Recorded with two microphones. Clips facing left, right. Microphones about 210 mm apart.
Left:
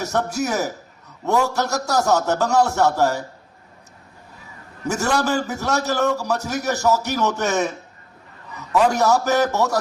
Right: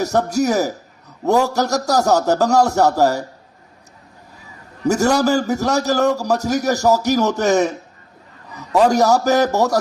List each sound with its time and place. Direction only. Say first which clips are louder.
0.0 s a man's voice: right 5 dB; 35° right (ahead or behind)
4.8 s a man's voice: right 6 dB; 40° right (ahead or behind)